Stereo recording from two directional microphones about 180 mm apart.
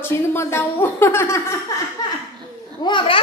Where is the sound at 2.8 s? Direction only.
30° left (ahead or behind).